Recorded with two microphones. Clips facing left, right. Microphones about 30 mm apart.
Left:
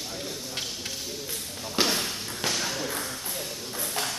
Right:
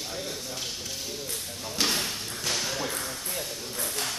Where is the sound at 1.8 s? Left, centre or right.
Centre.